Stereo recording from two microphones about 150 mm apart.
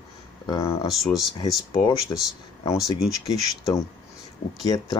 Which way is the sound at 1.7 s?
25° left (ahead or behind).